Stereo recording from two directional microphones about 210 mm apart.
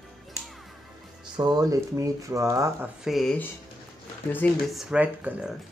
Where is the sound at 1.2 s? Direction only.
20° right (ahead or behind).